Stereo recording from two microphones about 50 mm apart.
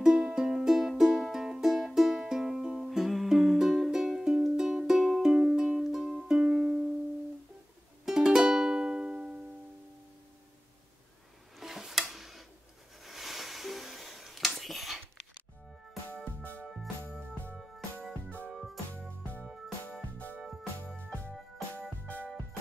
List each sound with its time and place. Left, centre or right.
0.0 s music: centre
3.1 s music: centre
5.8 s music: centre
8.0 s music: centre
11.5 s tick-tock: centre
13.0 s wheeze: centre
15.9 s music: centre
22.0 s music: left